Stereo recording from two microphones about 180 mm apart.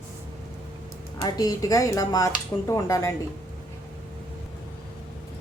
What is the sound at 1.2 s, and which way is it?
Speech, 20° left (ahead or behind).